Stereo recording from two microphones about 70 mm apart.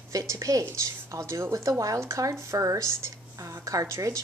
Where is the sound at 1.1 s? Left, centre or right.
Right.